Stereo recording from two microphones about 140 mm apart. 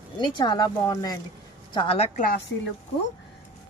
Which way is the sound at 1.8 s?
45° left (ahead or behind).